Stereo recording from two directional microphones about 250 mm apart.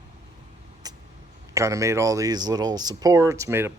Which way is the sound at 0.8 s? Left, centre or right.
Centre.